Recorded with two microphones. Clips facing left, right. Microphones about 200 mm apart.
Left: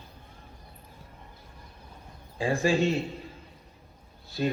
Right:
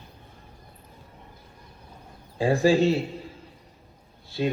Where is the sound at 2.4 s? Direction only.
35° right (ahead or behind).